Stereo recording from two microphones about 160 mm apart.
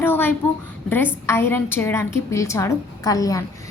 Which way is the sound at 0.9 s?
10° left (ahead or behind).